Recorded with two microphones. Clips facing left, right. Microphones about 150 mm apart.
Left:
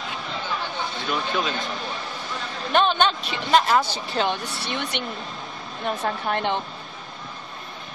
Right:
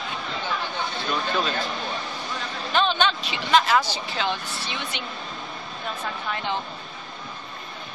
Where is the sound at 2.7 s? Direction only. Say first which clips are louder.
Left 3 dB; 50° left (ahead or behind).